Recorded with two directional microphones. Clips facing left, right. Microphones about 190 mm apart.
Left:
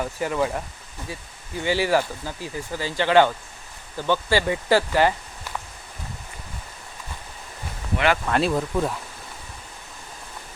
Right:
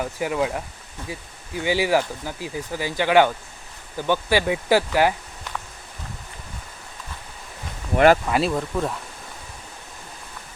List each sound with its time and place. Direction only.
0.0 s speech: 10° right (ahead or behind)
7.9 s speech: 45° right (ahead or behind)
8.3 s speech: centre (ahead or behind)